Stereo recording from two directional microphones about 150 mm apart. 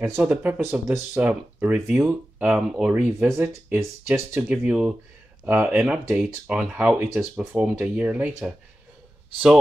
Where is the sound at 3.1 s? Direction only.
15° right (ahead or behind).